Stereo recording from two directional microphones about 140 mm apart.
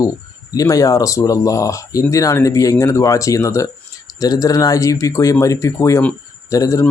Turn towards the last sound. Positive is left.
turn(degrees=25)  # may be behind; listen again after turning